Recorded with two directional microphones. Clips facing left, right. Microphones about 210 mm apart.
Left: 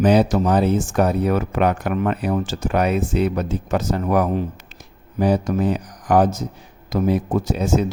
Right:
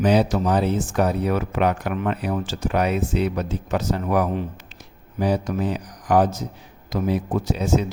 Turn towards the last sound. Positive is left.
turn(degrees=45)  # may be behind; listen again after turning